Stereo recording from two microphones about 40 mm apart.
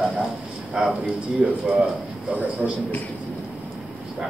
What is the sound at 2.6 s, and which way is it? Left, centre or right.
Speech, left.